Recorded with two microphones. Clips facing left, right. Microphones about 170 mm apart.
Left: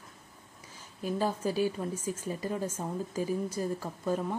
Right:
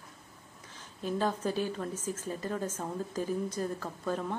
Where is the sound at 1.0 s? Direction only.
10° left (ahead or behind).